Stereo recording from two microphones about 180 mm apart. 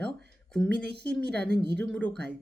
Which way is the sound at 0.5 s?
5° left (ahead or behind).